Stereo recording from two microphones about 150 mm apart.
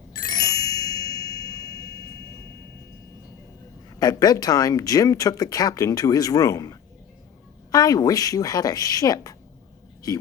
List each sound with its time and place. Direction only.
0.2 s ding: 25° left (ahead or behind)
4.0 s a man's voice: 25° left (ahead or behind)